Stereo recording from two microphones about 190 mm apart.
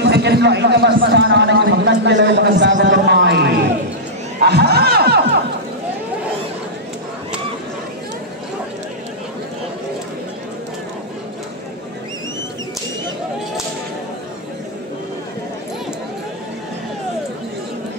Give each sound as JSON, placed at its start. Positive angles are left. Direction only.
{"t": 0.0, "sound": "a man's voice", "side_deg": -60}